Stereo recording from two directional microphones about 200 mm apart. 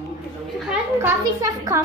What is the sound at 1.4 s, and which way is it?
Speech, 15° right (ahead or behind).